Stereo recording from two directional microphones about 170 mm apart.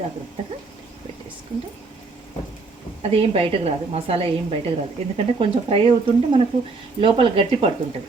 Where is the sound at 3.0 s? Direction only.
35° right (ahead or behind).